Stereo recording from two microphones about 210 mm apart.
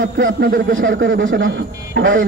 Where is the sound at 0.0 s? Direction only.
65° right (ahead or behind).